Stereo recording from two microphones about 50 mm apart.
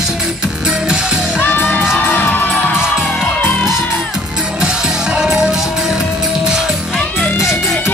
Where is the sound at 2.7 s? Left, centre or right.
Centre.